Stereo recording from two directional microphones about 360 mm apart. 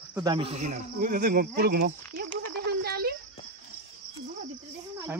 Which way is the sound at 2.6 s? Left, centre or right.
Right.